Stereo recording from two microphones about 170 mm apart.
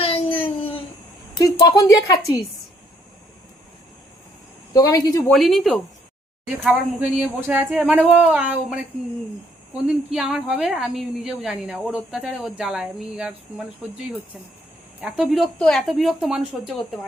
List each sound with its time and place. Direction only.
0.0 s a sound: 30° left (ahead or behind)
1.4 s speech: 20° left (ahead or behind)
4.7 s speech: 20° left (ahead or behind)
5.3 s speech: centre (ahead or behind)
9.8 s speech: 5° right (ahead or behind)
15.0 s speech: centre (ahead or behind)